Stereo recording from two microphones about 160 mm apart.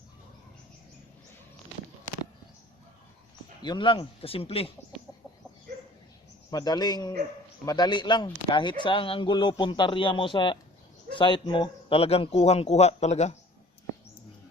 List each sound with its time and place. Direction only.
3.6 s a man's voice: 30° left (ahead or behind)
6.5 s a man's voice: 25° left (ahead or behind); by 13.3 s 45° left (ahead or behind)